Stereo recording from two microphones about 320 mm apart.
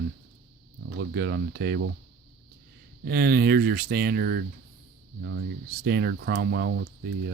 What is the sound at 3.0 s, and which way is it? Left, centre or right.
Speech, right.